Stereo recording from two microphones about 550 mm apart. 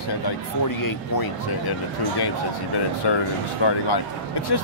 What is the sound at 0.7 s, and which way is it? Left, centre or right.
Speech, left.